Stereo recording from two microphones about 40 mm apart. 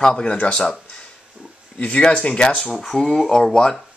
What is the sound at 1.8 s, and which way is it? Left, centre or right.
Speech, left.